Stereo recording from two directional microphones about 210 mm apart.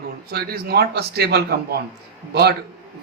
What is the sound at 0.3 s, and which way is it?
A man's voice, 50° right (ahead or behind).